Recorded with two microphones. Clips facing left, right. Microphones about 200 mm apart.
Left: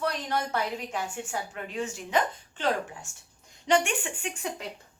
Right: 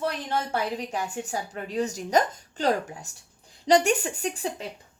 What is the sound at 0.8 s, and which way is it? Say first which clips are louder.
A woman's voice: right 3 dB; 40° right (ahead or behind).